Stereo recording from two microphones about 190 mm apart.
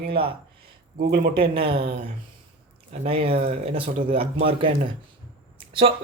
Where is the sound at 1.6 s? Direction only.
30° right (ahead or behind).